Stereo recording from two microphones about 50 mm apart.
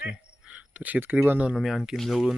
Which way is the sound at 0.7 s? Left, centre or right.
Right.